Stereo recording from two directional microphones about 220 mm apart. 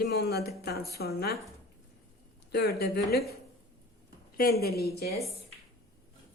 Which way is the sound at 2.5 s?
50° left (ahead or behind).